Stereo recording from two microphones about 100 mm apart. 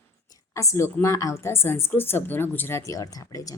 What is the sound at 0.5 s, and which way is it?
A woman's voice, 30° left (ahead or behind).